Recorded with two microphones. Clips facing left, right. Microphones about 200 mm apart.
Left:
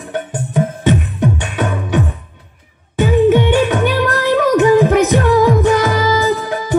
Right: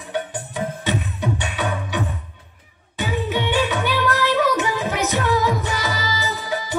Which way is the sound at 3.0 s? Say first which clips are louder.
Left 12 dB; 50° left (ahead or behind).